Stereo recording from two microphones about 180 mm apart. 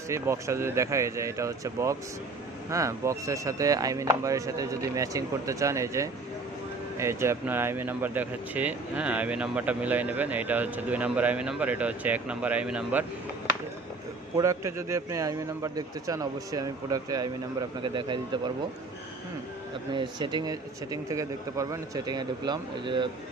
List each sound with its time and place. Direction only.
0.1 s speech: 15° right (ahead or behind)
14.3 s a man's voice: 15° right (ahead or behind)
19.9 s a man's voice: 25° right (ahead or behind)